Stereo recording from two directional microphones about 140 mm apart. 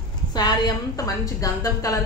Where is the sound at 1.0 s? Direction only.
25° left (ahead or behind).